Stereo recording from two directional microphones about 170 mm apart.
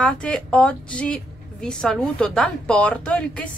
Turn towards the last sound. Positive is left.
turn(degrees=5)  # may be behind; listen again after turning